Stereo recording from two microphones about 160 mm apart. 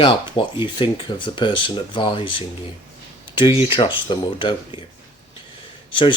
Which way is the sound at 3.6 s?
35° left (ahead or behind).